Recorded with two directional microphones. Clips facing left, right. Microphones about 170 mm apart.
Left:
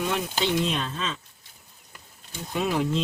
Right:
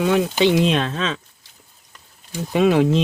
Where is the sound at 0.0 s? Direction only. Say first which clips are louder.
Right 10 dB; 90° right.